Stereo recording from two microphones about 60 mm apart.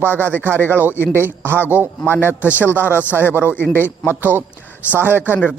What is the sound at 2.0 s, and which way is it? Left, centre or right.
A man's voice, left.